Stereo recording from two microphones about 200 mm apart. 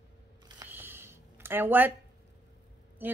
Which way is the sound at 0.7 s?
10° right (ahead or behind).